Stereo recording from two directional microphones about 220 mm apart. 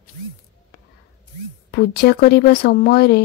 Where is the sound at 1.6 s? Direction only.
45° left (ahead or behind).